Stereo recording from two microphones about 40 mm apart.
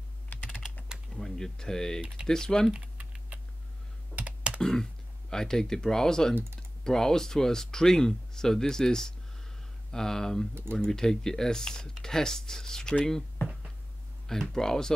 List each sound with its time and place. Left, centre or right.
0.3 s typing: left
1.1 s speech: centre
3.0 s typing: right
4.1 s computer keyboard: right
4.6 s computer keyboard: centre
5.3 s speech: centre
14.2 s speech: centre